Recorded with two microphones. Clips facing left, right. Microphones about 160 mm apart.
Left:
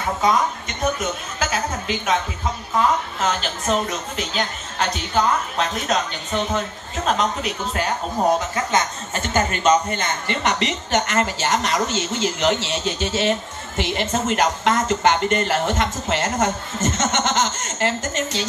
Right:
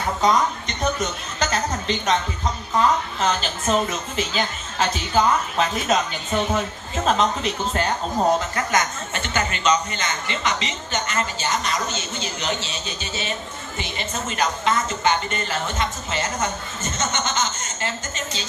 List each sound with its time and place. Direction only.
0.2 s a woman's voice: 5° left (ahead or behind)
3.2 s a woman's voice: centre (ahead or behind)
7.1 s a woman's voice: centre (ahead or behind)
9.1 s speech: 45° left (ahead or behind); by 18.5 s 80° left